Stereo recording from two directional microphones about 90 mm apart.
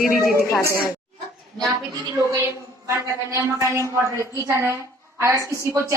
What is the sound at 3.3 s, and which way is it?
A woman's voice, 35° right (ahead or behind).